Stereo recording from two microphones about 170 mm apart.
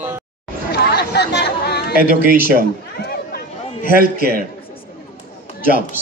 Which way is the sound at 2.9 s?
60° left (ahead or behind).